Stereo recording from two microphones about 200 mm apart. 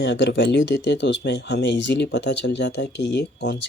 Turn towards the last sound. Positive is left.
turn(degrees=60)  # may be behind; listen again after turning